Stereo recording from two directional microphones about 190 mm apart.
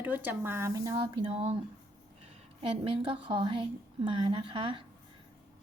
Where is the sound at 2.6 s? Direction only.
25° right (ahead or behind).